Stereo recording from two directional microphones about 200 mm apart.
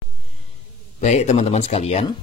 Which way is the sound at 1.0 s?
35° left (ahead or behind).